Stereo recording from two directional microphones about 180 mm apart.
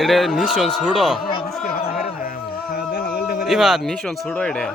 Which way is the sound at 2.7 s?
60° left (ahead or behind).